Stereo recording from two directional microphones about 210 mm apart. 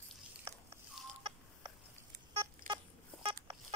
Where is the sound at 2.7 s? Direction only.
40° right (ahead or behind).